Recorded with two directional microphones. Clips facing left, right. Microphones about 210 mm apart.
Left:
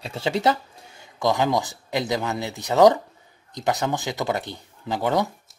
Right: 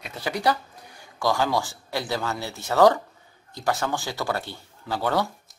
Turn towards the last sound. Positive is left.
turn(degrees=20)  # may be behind; listen again after turning